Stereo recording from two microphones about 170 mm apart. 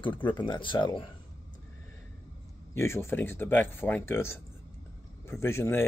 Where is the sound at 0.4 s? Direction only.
30° left (ahead or behind).